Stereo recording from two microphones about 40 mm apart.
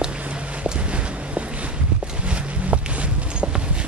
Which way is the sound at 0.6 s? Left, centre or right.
Right.